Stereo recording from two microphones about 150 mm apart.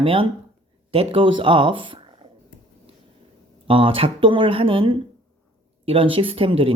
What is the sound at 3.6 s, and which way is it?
Speech, 35° right (ahead or behind).